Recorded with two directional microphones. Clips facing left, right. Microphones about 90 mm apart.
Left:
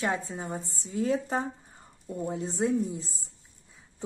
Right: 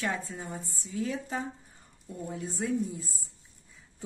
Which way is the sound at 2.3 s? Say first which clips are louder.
Left 4 dB; 25° left (ahead or behind).